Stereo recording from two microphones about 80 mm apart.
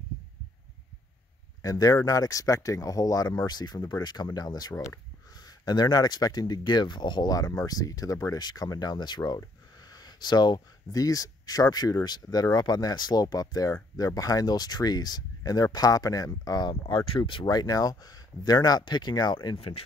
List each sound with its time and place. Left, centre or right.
1.6 s speech: left
3.4 s speech: left
4.7 s speech: left
5.3 s speech: left
7.3 s speech: left
9.8 s a sound: left
10.9 s speech: left